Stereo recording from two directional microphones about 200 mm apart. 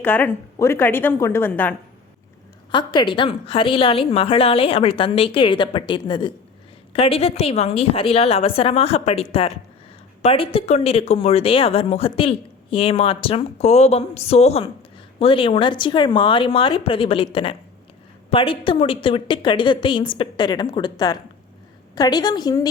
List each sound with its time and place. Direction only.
0.0 s a woman's voice: 10° left (ahead or behind)
2.7 s a woman's voice: 25° left (ahead or behind)